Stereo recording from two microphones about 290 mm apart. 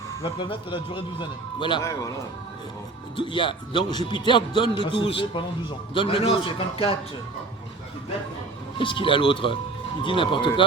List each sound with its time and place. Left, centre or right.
0.1 s speech: centre
3.2 s a man's voice: centre
8.8 s speech: centre